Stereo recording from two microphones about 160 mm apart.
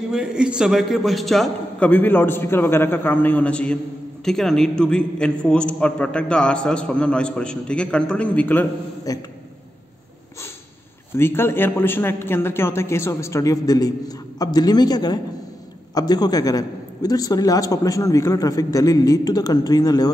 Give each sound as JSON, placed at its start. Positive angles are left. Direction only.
{"t": 0.1, "sound": "a man's voice", "side_deg": -5}
{"t": 9.1, "sound": "a man's voice", "side_deg": 20}
{"t": 11.1, "sound": "a man's voice", "side_deg": 15}